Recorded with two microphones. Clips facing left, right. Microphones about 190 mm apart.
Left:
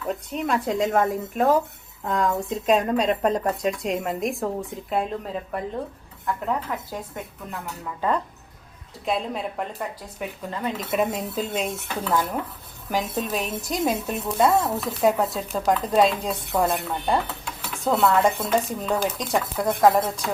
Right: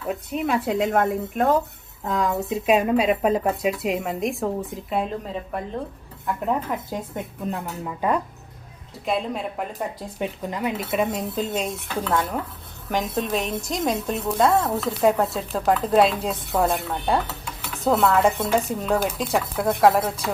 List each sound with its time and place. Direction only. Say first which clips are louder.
0.1 s speech: right 2 dB; 5° right (ahead or behind)
6.2 s speech: right 2 dB; 15° right (ahead or behind)
9.0 s speech: right 1 dB; centre (ahead or behind)